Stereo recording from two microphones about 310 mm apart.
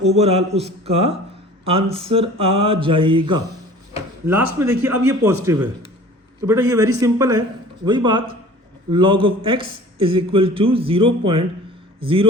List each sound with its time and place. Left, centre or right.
0.0 s a man's voice: centre